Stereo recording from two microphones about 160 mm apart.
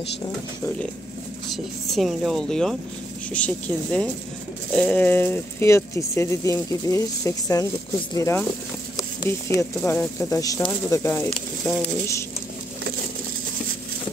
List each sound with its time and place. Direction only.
1.5 s speech: centre (ahead or behind); by 8.5 s 15° left (ahead or behind)
9.8 s speech: 15° left (ahead or behind)